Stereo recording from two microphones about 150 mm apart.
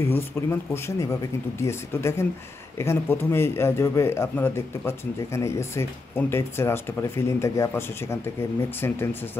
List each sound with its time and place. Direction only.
0.0 s a man's voice: 15° left (ahead or behind)